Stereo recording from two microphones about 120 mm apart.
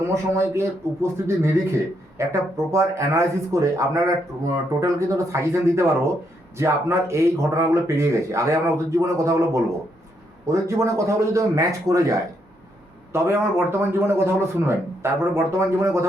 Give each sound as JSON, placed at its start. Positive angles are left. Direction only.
{"t": 0.1, "sound": "speech", "side_deg": -25}